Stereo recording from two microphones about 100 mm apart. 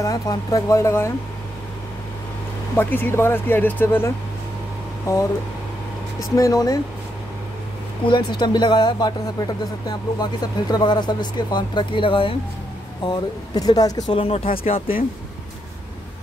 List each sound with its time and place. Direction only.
0.0 s speech: 35° left (ahead or behind)
2.7 s speech: 20° left (ahead or behind)
6.3 s speech: 35° left (ahead or behind)
8.1 s speech: 50° left (ahead or behind)
13.0 s speech: 45° left (ahead or behind)
14.1 s speech: 80° left